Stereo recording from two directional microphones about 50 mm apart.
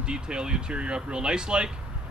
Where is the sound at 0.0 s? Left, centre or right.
Centre.